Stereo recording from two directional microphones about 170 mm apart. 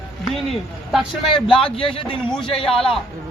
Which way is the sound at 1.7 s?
30° left (ahead or behind).